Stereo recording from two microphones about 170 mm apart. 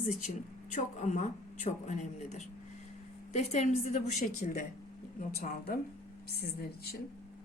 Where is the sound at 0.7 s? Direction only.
45° left (ahead or behind).